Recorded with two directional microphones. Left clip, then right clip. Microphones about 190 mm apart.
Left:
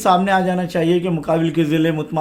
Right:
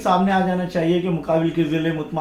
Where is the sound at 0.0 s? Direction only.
50° left (ahead or behind).